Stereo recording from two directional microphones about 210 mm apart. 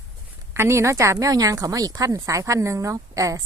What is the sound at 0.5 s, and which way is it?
A woman's voice, 10° right (ahead or behind).